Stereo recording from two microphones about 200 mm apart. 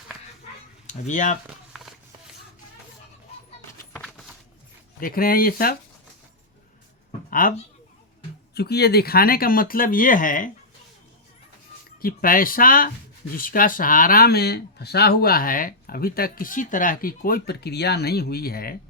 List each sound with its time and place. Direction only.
0.9 s speech: 40° left (ahead or behind)
1.5 s run: 5° right (ahead or behind)
3.9 s a sound: centre (ahead or behind)
4.9 s speech: 45° left (ahead or behind)
7.3 s a sound: 45° left (ahead or behind)
8.5 s speech: 55° left (ahead or behind)
12.0 s speech: 45° left (ahead or behind)